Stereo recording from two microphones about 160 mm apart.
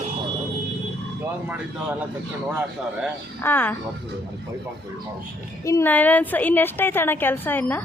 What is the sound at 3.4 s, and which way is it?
Speech, 10° left (ahead or behind).